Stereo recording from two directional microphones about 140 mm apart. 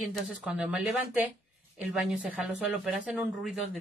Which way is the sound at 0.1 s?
Centre (ahead or behind).